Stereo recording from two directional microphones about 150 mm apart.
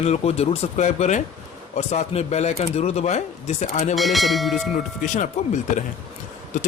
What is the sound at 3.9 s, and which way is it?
Bell, centre (ahead or behind).